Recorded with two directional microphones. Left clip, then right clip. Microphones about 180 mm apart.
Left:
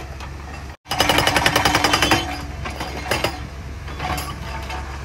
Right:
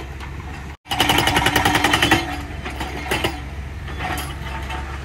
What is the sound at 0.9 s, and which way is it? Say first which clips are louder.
Jackhammer: even; 15° left (ahead or behind).